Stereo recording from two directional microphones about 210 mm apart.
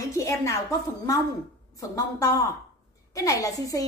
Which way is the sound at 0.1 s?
15° left (ahead or behind).